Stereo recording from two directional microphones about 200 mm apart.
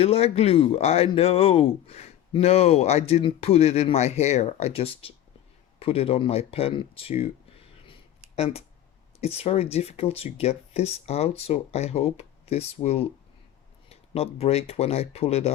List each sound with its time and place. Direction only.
0.0 s speech: 30° left (ahead or behind)
9.2 s speech: 30° left (ahead or behind)